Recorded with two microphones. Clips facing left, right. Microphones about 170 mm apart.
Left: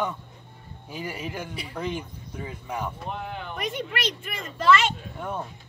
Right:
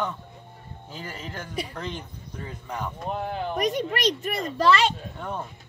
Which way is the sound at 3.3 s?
40° right (ahead or behind).